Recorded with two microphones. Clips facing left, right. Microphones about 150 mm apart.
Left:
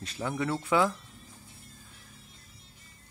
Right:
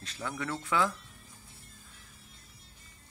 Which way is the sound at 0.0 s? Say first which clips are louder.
Left 5 dB; 15° left (ahead or behind).